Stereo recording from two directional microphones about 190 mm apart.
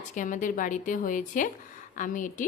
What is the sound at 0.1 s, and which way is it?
Speech, 40° left (ahead or behind).